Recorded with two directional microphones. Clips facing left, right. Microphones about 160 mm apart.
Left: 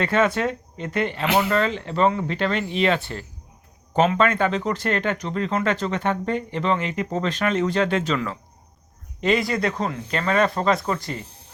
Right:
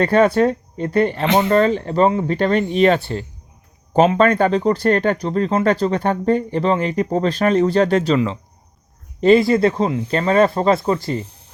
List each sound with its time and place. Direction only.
0.0 s speech: 35° right (ahead or behind)
9.2 s speech: 30° right (ahead or behind)